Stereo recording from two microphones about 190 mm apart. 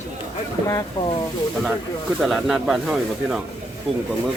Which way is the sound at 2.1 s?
Centre (ahead or behind).